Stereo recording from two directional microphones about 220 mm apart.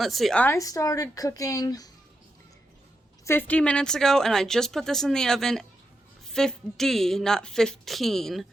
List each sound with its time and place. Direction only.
0.0 s speech: centre (ahead or behind); by 1.9 s 15° left (ahead or behind)
3.2 s speech: 10° left (ahead or behind)